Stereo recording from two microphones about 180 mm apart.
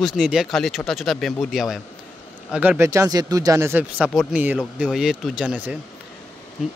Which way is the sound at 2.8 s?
15° right (ahead or behind).